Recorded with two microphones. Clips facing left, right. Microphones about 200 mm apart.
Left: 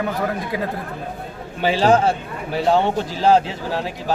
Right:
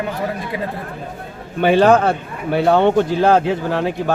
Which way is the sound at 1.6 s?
55° right (ahead or behind).